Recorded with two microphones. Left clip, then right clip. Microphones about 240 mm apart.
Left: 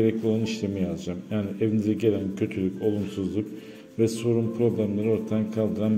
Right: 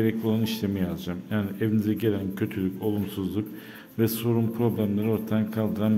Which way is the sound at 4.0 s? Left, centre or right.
Centre.